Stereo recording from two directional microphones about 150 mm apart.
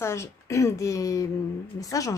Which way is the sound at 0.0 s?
20° left (ahead or behind).